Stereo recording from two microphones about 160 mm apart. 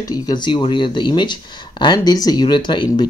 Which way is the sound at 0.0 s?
25° left (ahead or behind).